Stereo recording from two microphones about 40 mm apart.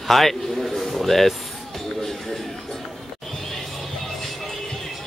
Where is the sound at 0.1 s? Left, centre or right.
Centre.